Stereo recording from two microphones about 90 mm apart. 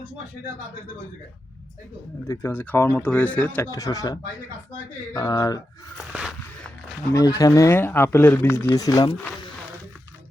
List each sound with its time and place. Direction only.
2.2 s speech: 30° left (ahead or behind)
3.7 s speech: 40° left (ahead or behind)
6.1 s a sound: 15° right (ahead or behind)
7.1 s speech: 40° left (ahead or behind)
7.8 s speech: 25° left (ahead or behind)
8.7 s speech: 40° left (ahead or behind)